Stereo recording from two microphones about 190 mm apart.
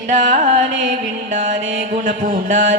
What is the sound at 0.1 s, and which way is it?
Carnatic music, 40° right (ahead or behind).